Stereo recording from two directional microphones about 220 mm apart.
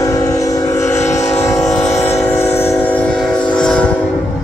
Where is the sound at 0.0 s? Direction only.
15° left (ahead or behind).